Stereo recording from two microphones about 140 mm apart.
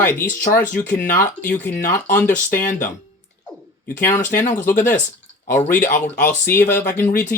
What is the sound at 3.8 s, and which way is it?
Speech, 65° left (ahead or behind).